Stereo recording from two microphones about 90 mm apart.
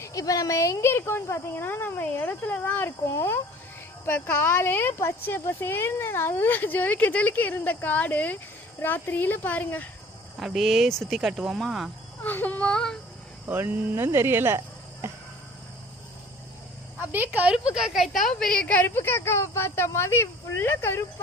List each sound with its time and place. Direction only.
0.0 s speech: 40° left (ahead or behind); by 2.9 s 20° left (ahead or behind)
3.1 s speech: 30° left (ahead or behind)
4.0 s speech: 20° left (ahead or behind)
10.4 s speech: centre (ahead or behind)
12.2 s speech: 20° left (ahead or behind)
13.5 s speech: 20° right (ahead or behind)
15.0 s cricket: 25° right (ahead or behind)
17.1 s speech: 20° right (ahead or behind); by 21.0 s 25° left (ahead or behind)